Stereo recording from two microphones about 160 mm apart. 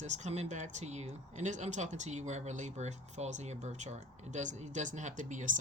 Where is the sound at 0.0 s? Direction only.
45° right (ahead or behind).